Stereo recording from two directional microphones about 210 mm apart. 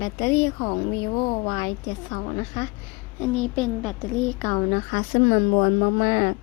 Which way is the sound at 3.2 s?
Centre (ahead or behind).